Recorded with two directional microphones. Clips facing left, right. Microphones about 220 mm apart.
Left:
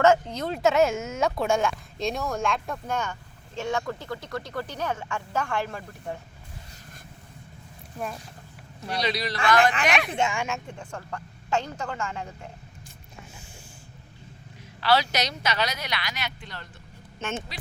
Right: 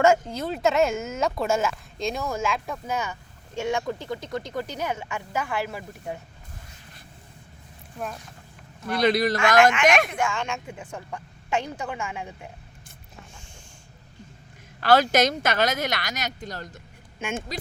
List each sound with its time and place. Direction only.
0.0 s speech: 10° right (ahead or behind)
8.9 s speech: 50° right (ahead or behind)
10.1 s a woman's voice: 25° left (ahead or behind)
10.3 s speech: 5° left (ahead or behind)
10.7 s speech: 10° right (ahead or behind)
14.8 s speech: 50° right (ahead or behind)
17.2 s speech: 10° right (ahead or behind)